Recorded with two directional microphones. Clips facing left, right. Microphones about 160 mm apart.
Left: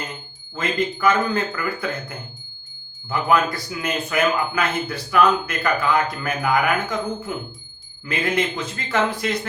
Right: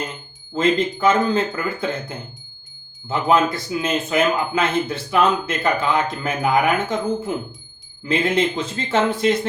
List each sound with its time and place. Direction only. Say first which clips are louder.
0.5 s speech: right 5 dB; 25° right (ahead or behind)